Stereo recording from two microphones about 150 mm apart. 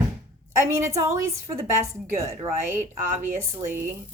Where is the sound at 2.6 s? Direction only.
15° right (ahead or behind).